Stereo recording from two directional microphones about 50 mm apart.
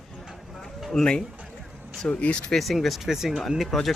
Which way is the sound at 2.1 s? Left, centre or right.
Left.